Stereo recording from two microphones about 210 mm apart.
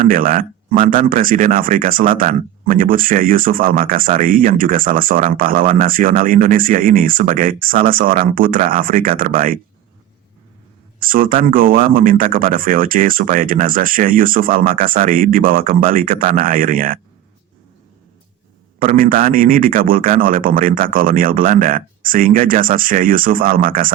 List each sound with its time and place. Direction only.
0.0 s speech: 40° right (ahead or behind)
11.0 s speech: 40° right (ahead or behind)
18.8 s speech: 40° right (ahead or behind)